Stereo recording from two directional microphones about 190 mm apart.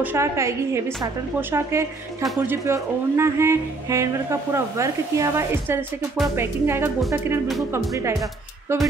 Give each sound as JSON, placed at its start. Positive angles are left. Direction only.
{"t": 0.0, "sound": "speech", "side_deg": -15}